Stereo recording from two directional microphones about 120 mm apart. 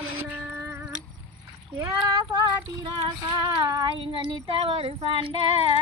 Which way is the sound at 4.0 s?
45° right (ahead or behind).